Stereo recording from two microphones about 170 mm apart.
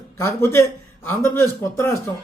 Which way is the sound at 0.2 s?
15° left (ahead or behind).